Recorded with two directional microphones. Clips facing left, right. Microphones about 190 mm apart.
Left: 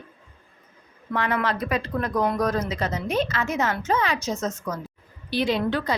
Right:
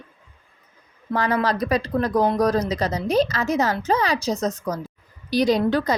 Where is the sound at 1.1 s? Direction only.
35° right (ahead or behind).